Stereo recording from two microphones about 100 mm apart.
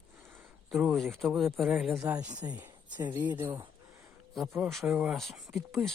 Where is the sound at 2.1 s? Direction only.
15° right (ahead or behind).